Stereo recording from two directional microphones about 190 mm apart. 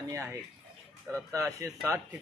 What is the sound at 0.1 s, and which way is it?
Speech, 15° right (ahead or behind).